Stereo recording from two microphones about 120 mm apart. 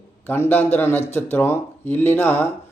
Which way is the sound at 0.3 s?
15° left (ahead or behind).